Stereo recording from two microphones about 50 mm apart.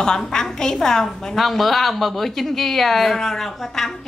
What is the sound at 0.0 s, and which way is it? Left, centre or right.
A woman's voice, centre.